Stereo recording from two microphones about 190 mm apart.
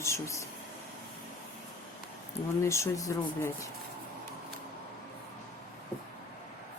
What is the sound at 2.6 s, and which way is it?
Speech, 15° left (ahead or behind).